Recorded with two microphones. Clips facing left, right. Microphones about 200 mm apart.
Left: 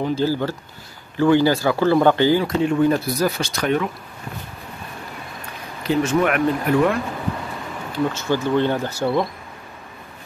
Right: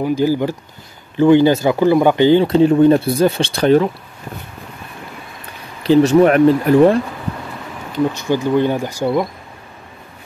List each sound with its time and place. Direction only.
0.0 s speech: 15° right (ahead or behind); by 3.9 s 30° right (ahead or behind)
5.9 s speech: 30° right (ahead or behind)
7.9 s speech: 15° right (ahead or behind)